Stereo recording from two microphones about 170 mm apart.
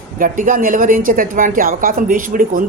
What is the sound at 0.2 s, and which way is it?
A woman's voice, 55° right (ahead or behind).